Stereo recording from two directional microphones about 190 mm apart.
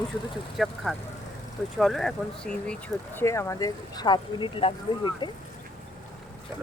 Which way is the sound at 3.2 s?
15° left (ahead or behind).